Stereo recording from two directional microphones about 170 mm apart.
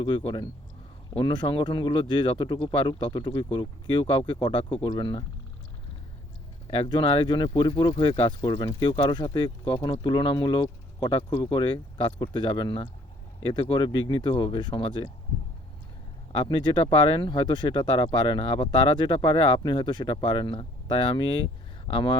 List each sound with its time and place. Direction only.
0.0 s speech: 30° left (ahead or behind)
6.7 s speech: 30° left (ahead or behind)
16.4 s speech: 30° left (ahead or behind)